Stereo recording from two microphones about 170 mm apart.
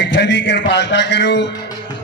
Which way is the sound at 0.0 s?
90° left.